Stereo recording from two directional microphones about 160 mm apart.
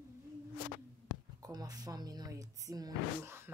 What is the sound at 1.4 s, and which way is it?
Speech, 25° right (ahead or behind).